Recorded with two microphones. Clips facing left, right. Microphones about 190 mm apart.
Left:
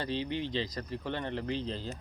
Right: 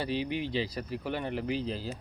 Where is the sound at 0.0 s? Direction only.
10° right (ahead or behind).